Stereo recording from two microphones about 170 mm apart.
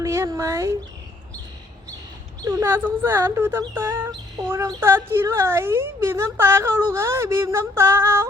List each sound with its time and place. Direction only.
0.0 s speech: 15° right (ahead or behind)
2.4 s speech: 15° right (ahead or behind)